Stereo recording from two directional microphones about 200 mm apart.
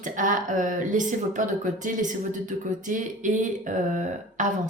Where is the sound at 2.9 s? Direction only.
40° right (ahead or behind).